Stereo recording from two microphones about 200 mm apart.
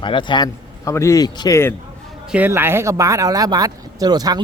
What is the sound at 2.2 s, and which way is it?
Speech, 10° right (ahead or behind).